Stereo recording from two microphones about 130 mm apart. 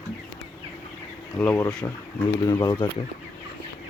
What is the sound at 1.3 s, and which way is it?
Speech, 15° left (ahead or behind).